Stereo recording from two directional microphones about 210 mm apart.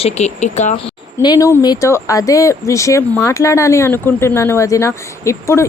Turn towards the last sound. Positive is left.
turn(degrees=15)  # may be behind; listen again after turning